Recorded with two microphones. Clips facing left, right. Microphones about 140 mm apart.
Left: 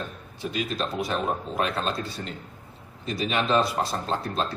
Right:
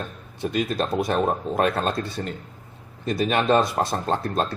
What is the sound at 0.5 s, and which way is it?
Speech, 50° right (ahead or behind).